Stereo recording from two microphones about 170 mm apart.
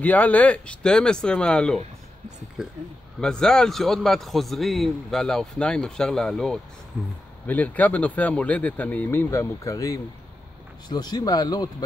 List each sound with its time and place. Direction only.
0.0 s a man's voice: 10° left (ahead or behind)